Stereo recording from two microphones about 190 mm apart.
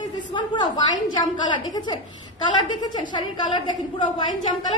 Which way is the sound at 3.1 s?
25° left (ahead or behind).